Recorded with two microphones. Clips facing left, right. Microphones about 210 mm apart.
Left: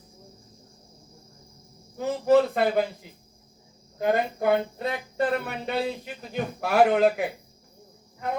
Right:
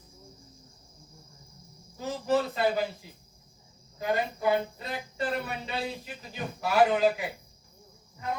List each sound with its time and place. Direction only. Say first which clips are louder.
2.0 s speech: left 7 dB; 60° left (ahead or behind)
3.9 s speech: left 5 dB; 55° left (ahead or behind)